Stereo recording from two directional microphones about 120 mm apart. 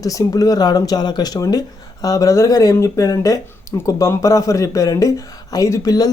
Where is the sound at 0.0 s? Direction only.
30° left (ahead or behind).